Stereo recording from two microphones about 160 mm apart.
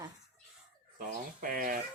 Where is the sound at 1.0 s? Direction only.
60° right (ahead or behind).